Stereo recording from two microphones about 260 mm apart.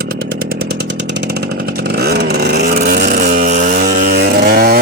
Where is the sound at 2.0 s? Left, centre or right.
Right.